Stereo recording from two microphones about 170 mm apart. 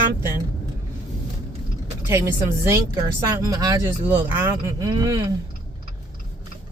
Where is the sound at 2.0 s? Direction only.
15° right (ahead or behind).